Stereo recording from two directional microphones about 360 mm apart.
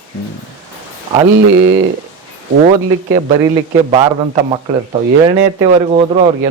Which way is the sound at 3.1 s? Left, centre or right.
Centre.